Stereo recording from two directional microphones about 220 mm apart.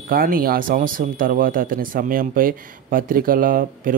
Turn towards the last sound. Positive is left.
turn(degrees=-40)  # may be behind; listen again after turning